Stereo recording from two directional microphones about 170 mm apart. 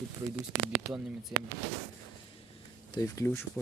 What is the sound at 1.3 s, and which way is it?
Speech, 10° right (ahead or behind).